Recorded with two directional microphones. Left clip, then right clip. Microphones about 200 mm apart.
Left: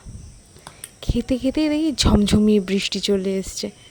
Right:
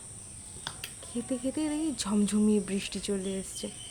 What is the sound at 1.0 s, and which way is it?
Speech, 40° left (ahead or behind).